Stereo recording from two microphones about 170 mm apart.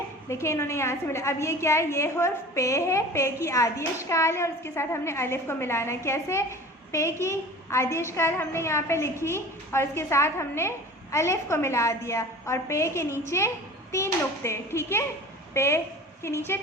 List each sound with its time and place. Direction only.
0.3 s a woman's voice: 15° left (ahead or behind)